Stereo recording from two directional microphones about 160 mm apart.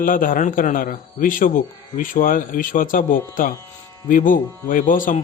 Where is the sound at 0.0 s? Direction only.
60° left (ahead or behind).